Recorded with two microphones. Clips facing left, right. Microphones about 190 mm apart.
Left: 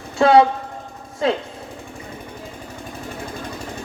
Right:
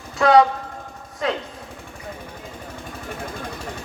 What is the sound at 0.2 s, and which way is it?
Speech, 25° left (ahead or behind).